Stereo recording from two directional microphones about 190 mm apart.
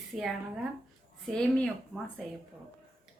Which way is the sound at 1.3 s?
5° left (ahead or behind).